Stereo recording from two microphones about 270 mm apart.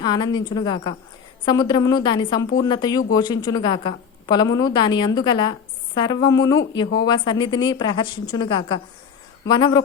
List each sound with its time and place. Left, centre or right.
0.0 s a woman's voice: centre